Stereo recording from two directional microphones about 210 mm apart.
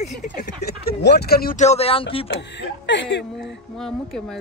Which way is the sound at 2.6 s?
60° left (ahead or behind).